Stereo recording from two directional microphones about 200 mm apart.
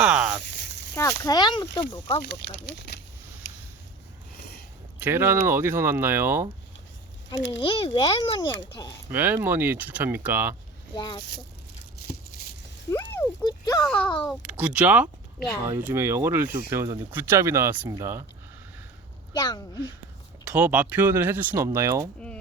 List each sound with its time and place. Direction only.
0.0 s a sound: 5° right (ahead or behind)
0.9 s speech: 15° left (ahead or behind)
2.2 s speech: 55° left (ahead or behind)
4.9 s speech: 10° right (ahead or behind)
7.3 s speech: 65° left (ahead or behind)
7.6 s speech: 25° left (ahead or behind)
9.1 s speech: 10° right (ahead or behind)
10.9 s speech: 20° left (ahead or behind)
12.9 s a sound: 15° left (ahead or behind)
13.8 s speech: 5° left (ahead or behind)
14.3 s speech: 5° right (ahead or behind)
19.3 s a woman's voice: 20° left (ahead or behind)
20.4 s speech: 5° right (ahead or behind)